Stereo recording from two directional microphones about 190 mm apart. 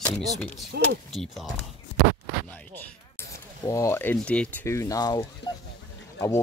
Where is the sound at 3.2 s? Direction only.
15° left (ahead or behind).